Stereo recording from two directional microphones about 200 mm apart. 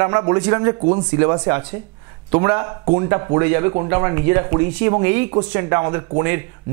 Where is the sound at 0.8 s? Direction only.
30° right (ahead or behind).